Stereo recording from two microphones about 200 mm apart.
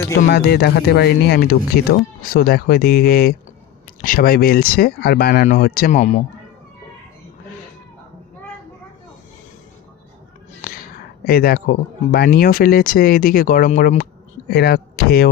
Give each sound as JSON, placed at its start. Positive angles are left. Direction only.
{"t": 0.3, "sound": "speech", "side_deg": 55}
{"t": 10.6, "sound": "a sound", "side_deg": 45}
{"t": 11.3, "sound": "speech", "side_deg": 50}